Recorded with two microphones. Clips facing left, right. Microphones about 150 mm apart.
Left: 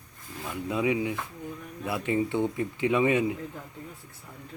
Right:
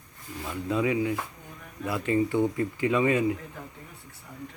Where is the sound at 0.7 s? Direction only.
15° left (ahead or behind).